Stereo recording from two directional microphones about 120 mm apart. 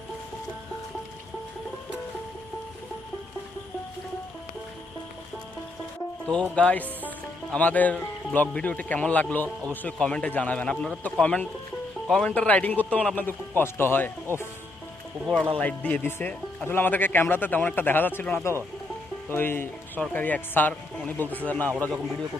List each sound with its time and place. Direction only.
6.2 s speech: 5° left (ahead or behind)
15.5 s speech: 10° left (ahead or behind)